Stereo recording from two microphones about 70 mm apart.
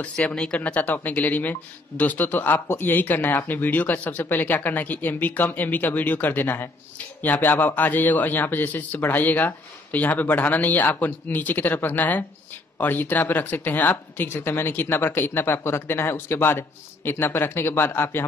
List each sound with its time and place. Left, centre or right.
0.0 s speech: centre
0.6 s speech: left